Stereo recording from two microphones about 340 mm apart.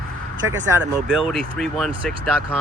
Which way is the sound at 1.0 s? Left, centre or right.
Centre.